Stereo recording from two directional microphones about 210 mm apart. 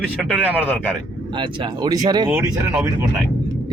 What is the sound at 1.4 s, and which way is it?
Speech, 20° right (ahead or behind).